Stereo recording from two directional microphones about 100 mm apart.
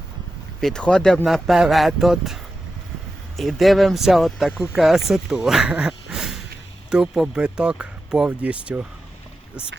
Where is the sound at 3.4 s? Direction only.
Centre (ahead or behind).